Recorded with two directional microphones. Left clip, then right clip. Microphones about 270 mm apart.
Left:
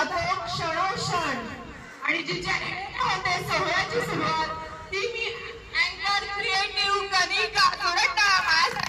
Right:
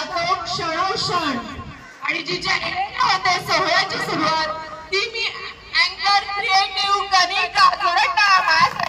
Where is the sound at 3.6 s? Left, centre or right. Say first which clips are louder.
Right 6 dB; centre.